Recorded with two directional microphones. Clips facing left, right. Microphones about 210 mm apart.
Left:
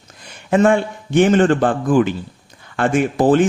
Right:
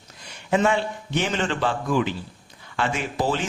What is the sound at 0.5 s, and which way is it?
Speech, 50° left (ahead or behind).